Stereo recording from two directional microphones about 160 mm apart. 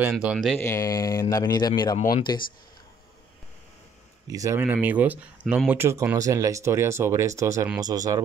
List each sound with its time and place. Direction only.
0.0 s speech: 5° right (ahead or behind)
0.6 s speech: 20° left (ahead or behind)
4.3 s speech: 20° right (ahead or behind)